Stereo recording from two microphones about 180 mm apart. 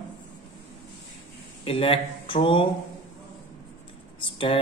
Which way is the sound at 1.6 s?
30° left (ahead or behind).